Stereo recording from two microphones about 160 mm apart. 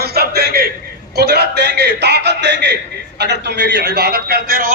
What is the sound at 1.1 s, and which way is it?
A man's voice, 90° right.